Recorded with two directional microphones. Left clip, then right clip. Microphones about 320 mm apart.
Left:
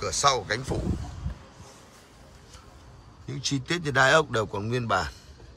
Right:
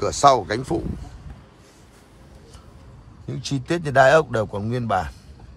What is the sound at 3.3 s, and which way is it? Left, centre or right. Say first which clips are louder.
Speech: right 3 dB; centre.